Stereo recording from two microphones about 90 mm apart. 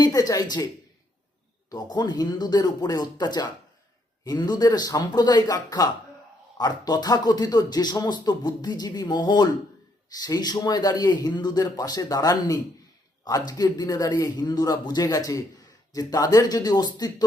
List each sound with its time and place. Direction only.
0.0 s speech: 45° left (ahead or behind)
1.7 s a man's voice: 50° left (ahead or behind)